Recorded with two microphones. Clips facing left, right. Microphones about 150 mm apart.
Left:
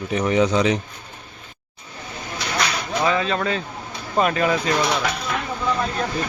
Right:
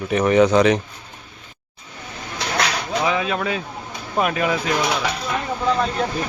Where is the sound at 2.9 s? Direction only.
5° right (ahead or behind).